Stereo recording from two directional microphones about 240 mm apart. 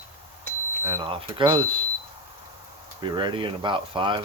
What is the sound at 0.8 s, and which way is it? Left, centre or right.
Speech, centre.